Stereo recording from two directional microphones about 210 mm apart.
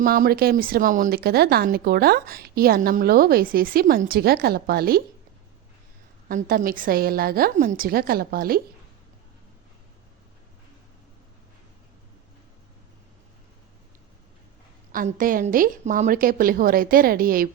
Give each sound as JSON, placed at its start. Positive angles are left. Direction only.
{"t": 0.0, "sound": "speech", "side_deg": -45}
{"t": 6.2, "sound": "speech", "side_deg": -40}
{"t": 14.9, "sound": "speech", "side_deg": -40}